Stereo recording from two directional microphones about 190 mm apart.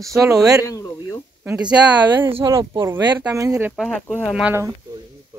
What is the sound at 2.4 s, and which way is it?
Speech, 15° right (ahead or behind).